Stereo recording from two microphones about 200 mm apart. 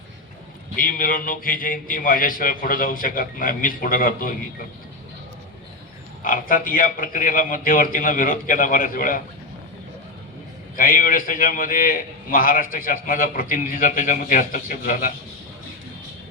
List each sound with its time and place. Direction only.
0.8 s a man's voice: 45° left (ahead or behind)
6.2 s a man's voice: 45° left (ahead or behind)
10.8 s a man's voice: 45° left (ahead or behind)